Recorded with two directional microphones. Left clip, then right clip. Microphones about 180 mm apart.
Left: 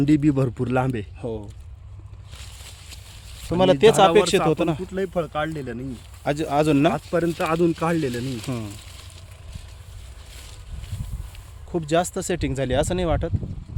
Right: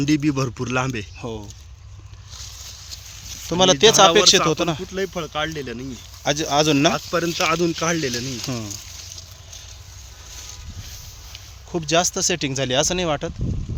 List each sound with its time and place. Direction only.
0.0 s speech: 30° left (ahead or behind)
1.2 s speech: centre (ahead or behind)
3.5 s speech: centre (ahead or behind)
4.9 s speech: 60° left (ahead or behind)
6.2 s speech: centre (ahead or behind)
6.9 s speech: 35° left (ahead or behind)
8.4 s speech: 5° right (ahead or behind)
11.7 s speech: centre (ahead or behind)